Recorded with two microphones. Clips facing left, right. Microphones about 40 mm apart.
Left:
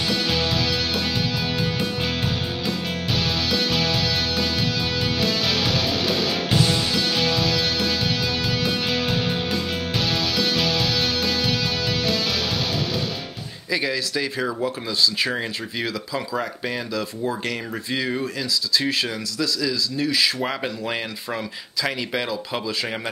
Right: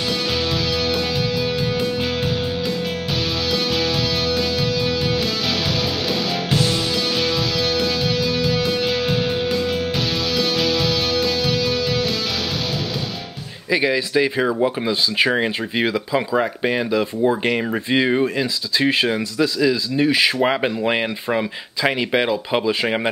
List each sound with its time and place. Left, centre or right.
13.7 s speech: right